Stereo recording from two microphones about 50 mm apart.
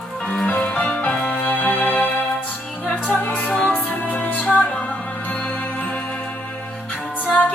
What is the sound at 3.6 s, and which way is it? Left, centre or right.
Music, left.